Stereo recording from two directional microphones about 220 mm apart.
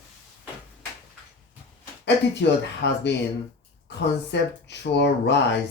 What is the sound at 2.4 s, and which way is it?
Speech, 55° left (ahead or behind).